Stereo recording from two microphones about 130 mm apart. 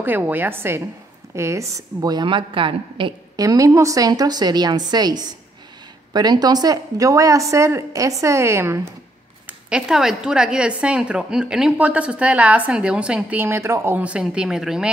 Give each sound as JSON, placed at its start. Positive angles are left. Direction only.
{"t": 0.0, "sound": "a woman's voice", "side_deg": -15}
{"t": 3.3, "sound": "a woman's voice", "side_deg": -25}
{"t": 9.5, "sound": "a woman's voice", "side_deg": -5}